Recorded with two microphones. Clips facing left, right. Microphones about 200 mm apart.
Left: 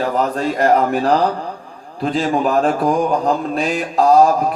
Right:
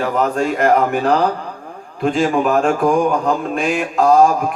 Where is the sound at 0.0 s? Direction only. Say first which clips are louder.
Right 1 dB; 35° left (ahead or behind).